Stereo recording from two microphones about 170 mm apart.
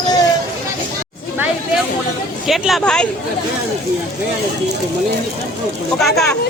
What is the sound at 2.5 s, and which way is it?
Speech, centre (ahead or behind).